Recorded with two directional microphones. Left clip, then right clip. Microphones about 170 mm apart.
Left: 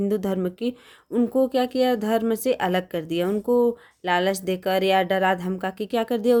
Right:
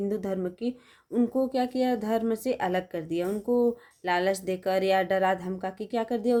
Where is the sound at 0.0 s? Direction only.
40° left (ahead or behind).